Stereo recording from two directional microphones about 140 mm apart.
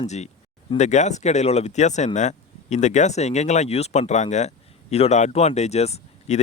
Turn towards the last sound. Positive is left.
turn(degrees=50)  # may be behind; listen again after turning